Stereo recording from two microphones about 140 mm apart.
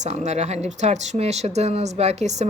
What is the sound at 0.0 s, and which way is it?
Speech, 55° right (ahead or behind).